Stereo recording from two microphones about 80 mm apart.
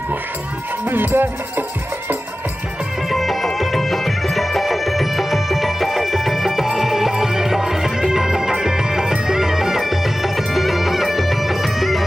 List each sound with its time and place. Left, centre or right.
0.8 s music: right
3.1 s music: centre